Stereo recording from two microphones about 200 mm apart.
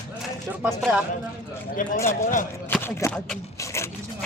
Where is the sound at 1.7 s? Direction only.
40° left (ahead or behind).